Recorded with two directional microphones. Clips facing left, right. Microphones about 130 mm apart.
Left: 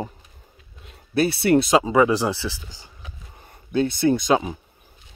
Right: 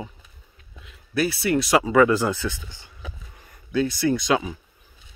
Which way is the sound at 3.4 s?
30° left (ahead or behind).